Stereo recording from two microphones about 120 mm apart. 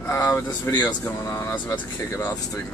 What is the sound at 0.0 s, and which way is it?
Speech, 25° left (ahead or behind).